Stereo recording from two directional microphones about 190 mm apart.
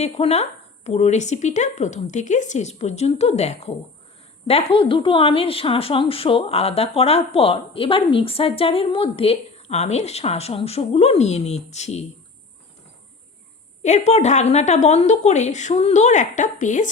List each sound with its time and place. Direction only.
0.0 s a woman's voice: 35° left (ahead or behind)
13.8 s a woman's voice: 35° left (ahead or behind)